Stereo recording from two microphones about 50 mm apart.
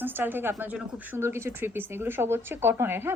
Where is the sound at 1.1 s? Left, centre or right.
Right.